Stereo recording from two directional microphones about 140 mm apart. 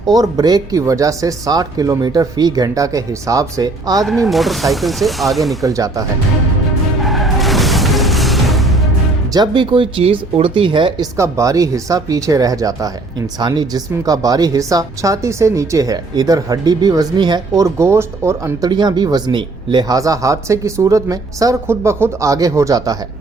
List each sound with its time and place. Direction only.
0.0 s speech: 25° right (ahead or behind)
4.0 s speech: centre (ahead or behind)
5.6 s speech: 25° right (ahead or behind)
7.0 s music: centre (ahead or behind)
9.3 s speech: 30° right (ahead or behind)
11.2 s speech: 25° right (ahead or behind)
18.7 s speech: 30° right (ahead or behind)